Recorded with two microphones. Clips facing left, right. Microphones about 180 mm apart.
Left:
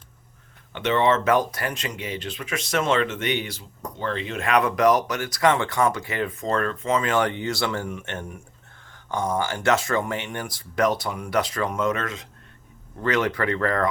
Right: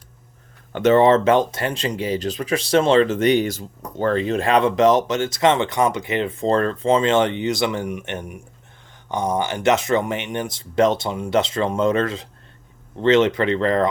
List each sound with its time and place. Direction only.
0.7 s speech: 45° right (ahead or behind); by 13.8 s 20° right (ahead or behind)